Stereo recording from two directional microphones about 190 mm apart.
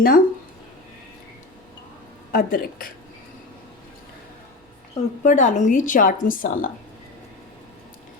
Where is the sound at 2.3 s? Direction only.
50° left (ahead or behind).